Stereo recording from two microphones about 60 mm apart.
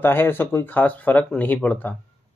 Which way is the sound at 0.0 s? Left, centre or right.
Left.